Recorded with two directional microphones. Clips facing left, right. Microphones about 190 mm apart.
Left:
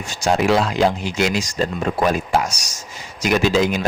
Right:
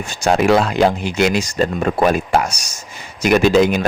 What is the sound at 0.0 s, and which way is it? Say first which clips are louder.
Speech: right 3 dB; 55° right (ahead or behind).